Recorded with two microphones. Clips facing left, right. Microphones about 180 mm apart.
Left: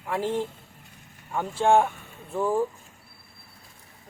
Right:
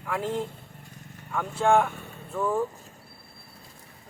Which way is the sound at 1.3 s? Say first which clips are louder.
Left 1 dB; 30° left (ahead or behind).